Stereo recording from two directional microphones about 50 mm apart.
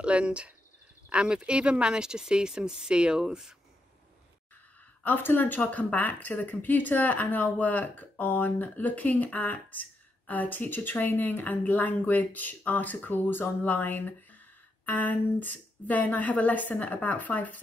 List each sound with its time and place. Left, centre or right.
0.0 s speech: right
5.0 s speech: left